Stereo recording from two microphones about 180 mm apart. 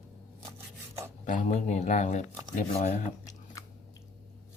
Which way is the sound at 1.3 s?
45° left (ahead or behind).